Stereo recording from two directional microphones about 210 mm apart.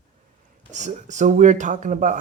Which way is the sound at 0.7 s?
35° right (ahead or behind).